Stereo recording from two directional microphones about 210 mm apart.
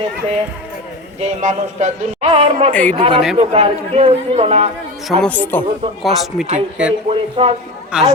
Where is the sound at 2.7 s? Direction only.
5° left (ahead or behind).